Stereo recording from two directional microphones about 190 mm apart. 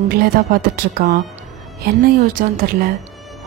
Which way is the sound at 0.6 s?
50° right (ahead or behind).